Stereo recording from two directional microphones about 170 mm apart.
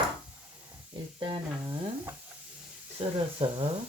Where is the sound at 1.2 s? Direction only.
25° right (ahead or behind).